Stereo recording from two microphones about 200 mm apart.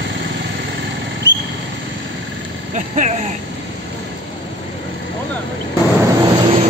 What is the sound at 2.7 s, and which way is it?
Speech, 35° right (ahead or behind).